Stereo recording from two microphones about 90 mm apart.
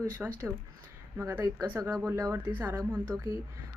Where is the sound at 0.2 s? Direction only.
15° right (ahead or behind).